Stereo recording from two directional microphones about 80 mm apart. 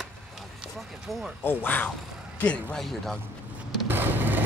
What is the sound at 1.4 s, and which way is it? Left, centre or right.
Speech, left.